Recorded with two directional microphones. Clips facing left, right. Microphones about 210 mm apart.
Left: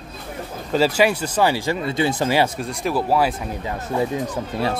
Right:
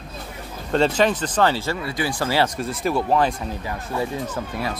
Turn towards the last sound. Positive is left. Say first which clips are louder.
# left 4 dB
turn(degrees=25)  # may be behind; listen again after turning